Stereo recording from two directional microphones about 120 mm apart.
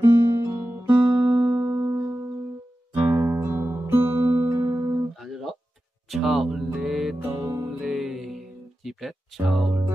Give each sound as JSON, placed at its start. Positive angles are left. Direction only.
{"t": 0.0, "sound": "guitar", "side_deg": -30}
{"t": 0.5, "sound": "guitar", "side_deg": -15}
{"t": 1.3, "sound": "music", "side_deg": -40}
{"t": 1.7, "sound": "music", "side_deg": -25}
{"t": 5.1, "sound": "guitar", "side_deg": 0}
{"t": 6.0, "sound": "music", "side_deg": 0}
{"t": 7.4, "sound": "music", "side_deg": -25}
{"t": 7.8, "sound": "music", "side_deg": -5}
{"t": 8.8, "sound": "a sound", "side_deg": 0}